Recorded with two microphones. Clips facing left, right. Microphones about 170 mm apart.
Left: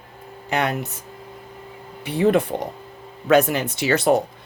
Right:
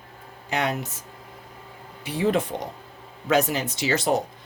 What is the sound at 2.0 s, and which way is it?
Speech, 60° left (ahead or behind).